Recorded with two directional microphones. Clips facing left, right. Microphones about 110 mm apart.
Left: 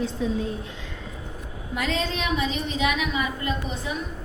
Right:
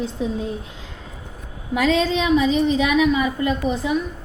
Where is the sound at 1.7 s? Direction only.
90° right.